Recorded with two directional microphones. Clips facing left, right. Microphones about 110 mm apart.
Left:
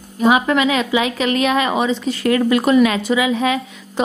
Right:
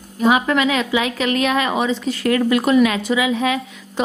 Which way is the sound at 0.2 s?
20° left (ahead or behind).